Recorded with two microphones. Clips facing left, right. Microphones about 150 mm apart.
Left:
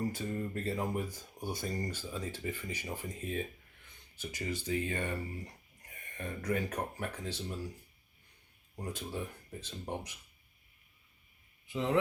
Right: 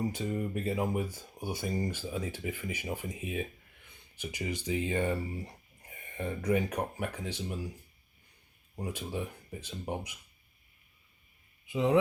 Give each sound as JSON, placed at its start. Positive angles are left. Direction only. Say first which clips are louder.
{"t": 0.1, "sound": "speech", "louder": "right 3 dB", "side_deg": -20}
{"t": 5.9, "sound": "a sound", "louder": "right 5 dB", "side_deg": -30}
{"t": 6.5, "sound": "speech", "louder": "right 4 dB", "side_deg": -15}
{"t": 8.7, "sound": "speech", "louder": "right 3 dB", "side_deg": -10}
{"t": 11.6, "sound": "speech", "louder": "right 5 dB", "side_deg": -15}